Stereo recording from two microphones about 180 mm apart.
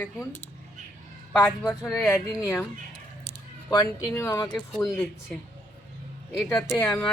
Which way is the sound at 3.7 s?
20° left (ahead or behind).